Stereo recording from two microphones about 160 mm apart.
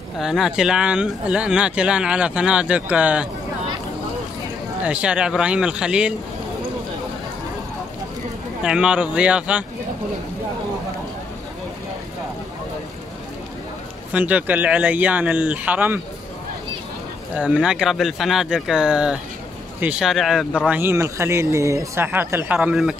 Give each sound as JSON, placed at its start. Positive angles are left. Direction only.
{"t": 0.2, "sound": "speech", "side_deg": -5}
{"t": 4.8, "sound": "speech", "side_deg": -5}
{"t": 8.6, "sound": "speech", "side_deg": -5}
{"t": 14.1, "sound": "speech", "side_deg": -10}
{"t": 17.4, "sound": "speech", "side_deg": -5}
{"t": 20.6, "sound": "speech", "side_deg": -10}